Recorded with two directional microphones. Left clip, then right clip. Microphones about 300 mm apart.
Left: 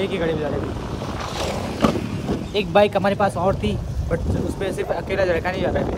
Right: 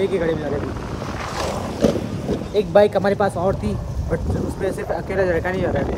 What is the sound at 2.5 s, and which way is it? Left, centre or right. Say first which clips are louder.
Speech: right 2 dB; centre.